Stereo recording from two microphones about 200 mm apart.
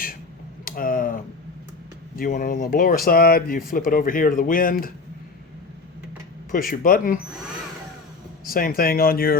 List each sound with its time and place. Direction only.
0.6 s a sound: 45° left (ahead or behind)
2.1 s speech: 45° left (ahead or behind)
6.5 s speech: 45° left (ahead or behind)
8.4 s speech: 45° left (ahead or behind)